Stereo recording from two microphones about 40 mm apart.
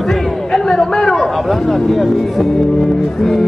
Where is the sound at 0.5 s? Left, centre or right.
Centre.